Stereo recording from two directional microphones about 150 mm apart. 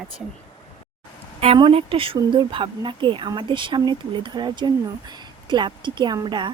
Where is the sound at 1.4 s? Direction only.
40° right (ahead or behind).